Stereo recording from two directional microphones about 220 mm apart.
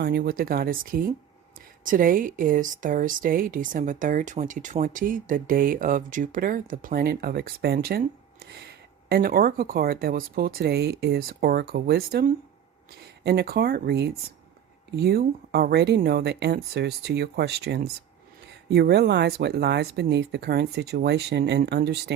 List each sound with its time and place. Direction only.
0.0 s speech: 50° right (ahead or behind)
13.2 s speech: 45° right (ahead or behind)